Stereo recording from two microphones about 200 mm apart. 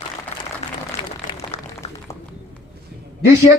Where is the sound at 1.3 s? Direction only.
35° left (ahead or behind).